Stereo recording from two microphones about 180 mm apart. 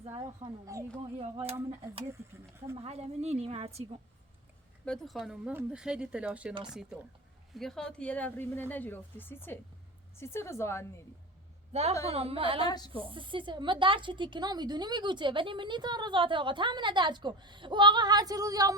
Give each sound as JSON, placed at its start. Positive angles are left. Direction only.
{"t": 0.0, "sound": "speech", "side_deg": -30}
{"t": 1.2, "sound": "a woman's voice", "side_deg": -35}
{"t": 2.7, "sound": "a woman's voice", "side_deg": -35}
{"t": 4.9, "sound": "speech", "side_deg": 0}
{"t": 11.7, "sound": "a man's voice", "side_deg": -35}
{"t": 12.6, "sound": "speech", "side_deg": 25}
{"t": 12.9, "sound": "speech", "side_deg": -30}